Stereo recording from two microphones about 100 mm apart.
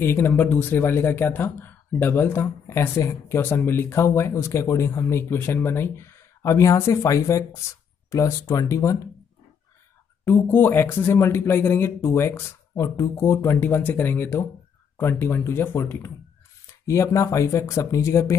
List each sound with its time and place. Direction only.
0.0 s speech: 20° left (ahead or behind)
10.2 s speech: 20° left (ahead or behind)